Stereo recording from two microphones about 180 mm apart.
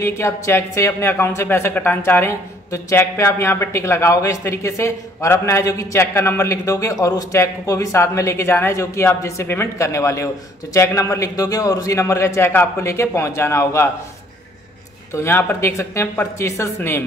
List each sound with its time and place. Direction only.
0.0 s speech: 15° left (ahead or behind)
15.1 s speech: 10° left (ahead or behind)